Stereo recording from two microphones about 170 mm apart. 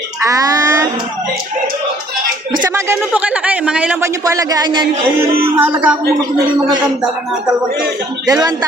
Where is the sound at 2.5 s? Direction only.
20° right (ahead or behind).